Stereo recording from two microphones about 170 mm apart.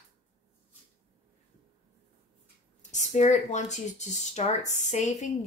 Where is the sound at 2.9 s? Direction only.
45° left (ahead or behind).